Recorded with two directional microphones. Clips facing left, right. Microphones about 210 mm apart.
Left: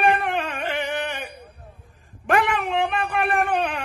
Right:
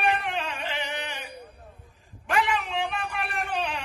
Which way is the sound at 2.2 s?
55° left (ahead or behind).